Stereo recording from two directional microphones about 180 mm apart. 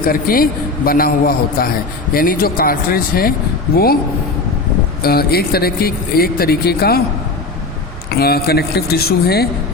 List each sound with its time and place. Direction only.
0.0 s speech: 55° left (ahead or behind)
5.0 s speech: 60° left (ahead or behind)
8.1 s speech: 60° left (ahead or behind)